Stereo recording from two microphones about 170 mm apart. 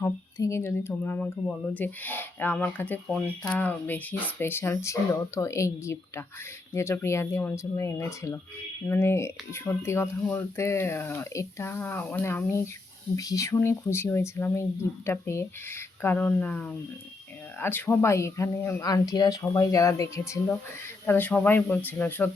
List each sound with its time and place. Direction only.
0.0 s speech: 15° left (ahead or behind)